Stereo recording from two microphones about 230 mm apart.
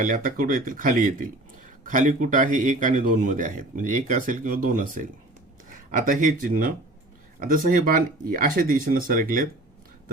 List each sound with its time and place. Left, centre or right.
0.0 s a man's voice: right